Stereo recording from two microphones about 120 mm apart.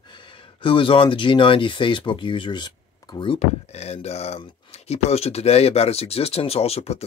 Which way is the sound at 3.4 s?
60° left (ahead or behind).